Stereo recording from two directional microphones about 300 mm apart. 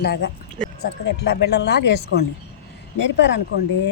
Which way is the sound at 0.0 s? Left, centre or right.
Left.